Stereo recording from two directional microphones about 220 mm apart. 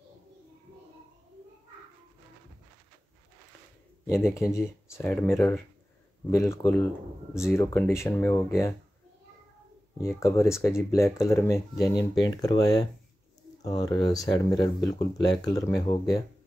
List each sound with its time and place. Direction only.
4.0 s speech: 10° left (ahead or behind)
9.9 s speech: 15° left (ahead or behind)